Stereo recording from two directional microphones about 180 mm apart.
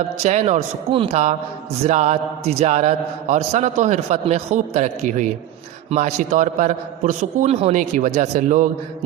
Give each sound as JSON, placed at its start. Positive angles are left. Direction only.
{"t": 0.2, "sound": "a man's voice", "side_deg": -40}